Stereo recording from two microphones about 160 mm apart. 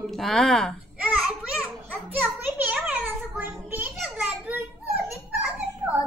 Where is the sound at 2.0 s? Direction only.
10° right (ahead or behind).